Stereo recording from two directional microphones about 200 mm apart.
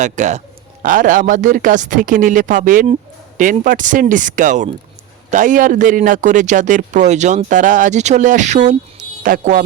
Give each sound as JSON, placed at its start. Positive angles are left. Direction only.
{"t": 0.0, "sound": "a man's voice", "side_deg": -35}